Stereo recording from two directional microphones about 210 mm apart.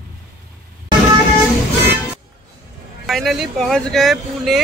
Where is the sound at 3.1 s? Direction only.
Centre (ahead or behind).